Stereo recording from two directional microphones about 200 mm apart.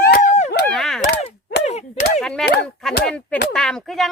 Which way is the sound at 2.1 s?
5° left (ahead or behind).